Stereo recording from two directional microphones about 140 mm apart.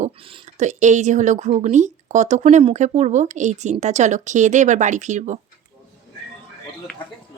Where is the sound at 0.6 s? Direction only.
60° right (ahead or behind).